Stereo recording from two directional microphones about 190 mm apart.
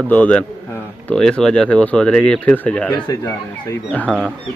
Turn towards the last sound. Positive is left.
turn(degrees=10)  # may be behind; listen again after turning